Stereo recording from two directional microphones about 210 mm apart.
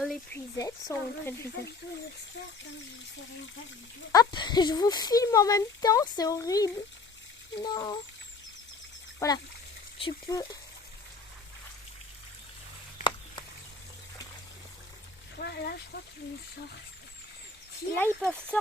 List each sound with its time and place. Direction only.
0.5 s speech: 15° left (ahead or behind)
4.1 s speech: 20° left (ahead or behind)
9.1 s speech: 15° left (ahead or behind)
15.4 s speech: 50° left (ahead or behind)
17.9 s speech: 5° left (ahead or behind)